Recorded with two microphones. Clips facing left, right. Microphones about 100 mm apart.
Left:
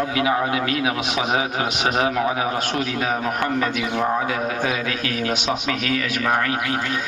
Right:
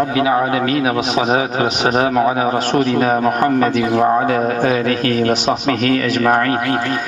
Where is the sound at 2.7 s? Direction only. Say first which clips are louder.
Right 9 dB; 45° right (ahead or behind).